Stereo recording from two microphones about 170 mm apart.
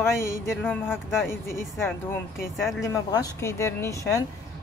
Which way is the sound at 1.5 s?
15° left (ahead or behind).